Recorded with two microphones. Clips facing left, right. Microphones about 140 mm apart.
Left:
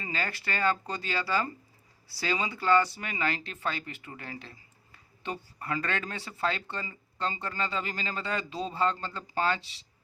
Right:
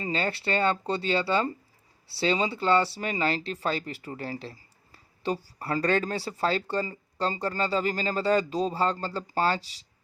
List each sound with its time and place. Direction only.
0.0 s speech: 30° right (ahead or behind)